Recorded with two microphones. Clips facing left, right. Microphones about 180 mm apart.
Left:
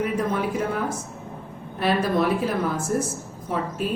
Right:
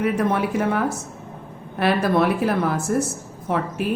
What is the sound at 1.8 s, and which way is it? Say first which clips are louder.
A woman's voice: right 3 dB; 65° right (ahead or behind).